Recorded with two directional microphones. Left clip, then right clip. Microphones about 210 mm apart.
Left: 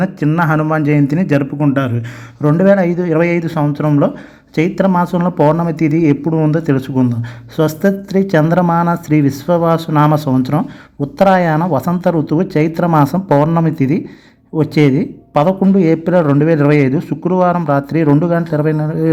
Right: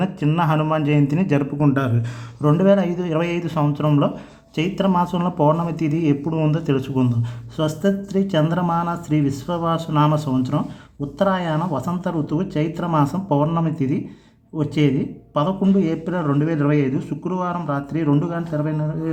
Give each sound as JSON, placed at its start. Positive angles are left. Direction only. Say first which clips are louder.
{"t": 0.0, "sound": "a man's voice", "louder": "left 6 dB", "side_deg": 10}